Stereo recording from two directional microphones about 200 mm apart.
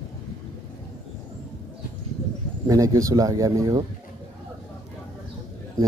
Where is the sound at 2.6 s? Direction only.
15° right (ahead or behind).